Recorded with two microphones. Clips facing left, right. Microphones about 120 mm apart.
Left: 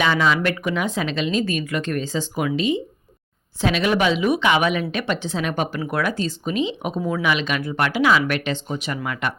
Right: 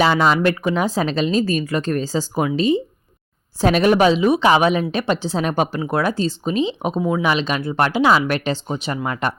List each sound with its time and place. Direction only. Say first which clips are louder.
0.0 s speech: right 4 dB; 40° right (ahead or behind)